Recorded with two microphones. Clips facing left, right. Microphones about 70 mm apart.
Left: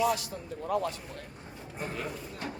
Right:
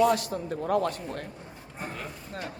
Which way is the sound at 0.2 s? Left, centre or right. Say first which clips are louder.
Right 7 dB; right.